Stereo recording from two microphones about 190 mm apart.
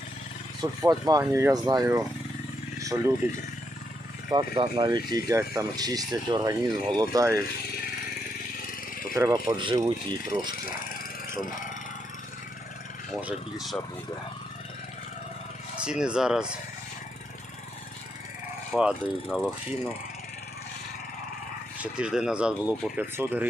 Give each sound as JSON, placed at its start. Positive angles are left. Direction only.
{"t": 0.6, "sound": "speech", "side_deg": -20}
{"t": 2.7, "sound": "vehicle", "side_deg": -15}
{"t": 3.2, "sound": "speech", "side_deg": -15}
{"t": 9.1, "sound": "speech", "side_deg": -20}
{"t": 10.5, "sound": "vehicle", "side_deg": 50}
{"t": 13.2, "sound": "speech", "side_deg": 0}
{"t": 15.8, "sound": "speech", "side_deg": -5}
{"t": 18.7, "sound": "speech", "side_deg": -5}
{"t": 21.8, "sound": "speech", "side_deg": -5}